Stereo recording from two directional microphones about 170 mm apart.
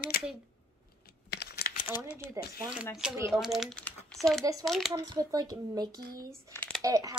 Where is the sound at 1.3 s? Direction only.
70° left (ahead or behind).